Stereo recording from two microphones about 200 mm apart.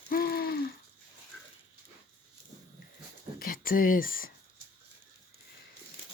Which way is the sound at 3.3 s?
45° left (ahead or behind).